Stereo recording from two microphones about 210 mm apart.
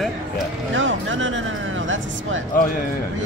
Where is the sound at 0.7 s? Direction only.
65° right (ahead or behind).